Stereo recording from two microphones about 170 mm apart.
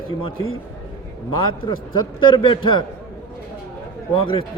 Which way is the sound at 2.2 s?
30° left (ahead or behind).